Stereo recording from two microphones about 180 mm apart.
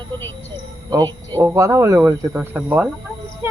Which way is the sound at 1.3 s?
15° right (ahead or behind).